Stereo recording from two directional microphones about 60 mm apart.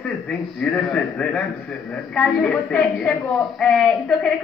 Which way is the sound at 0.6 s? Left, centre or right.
Centre.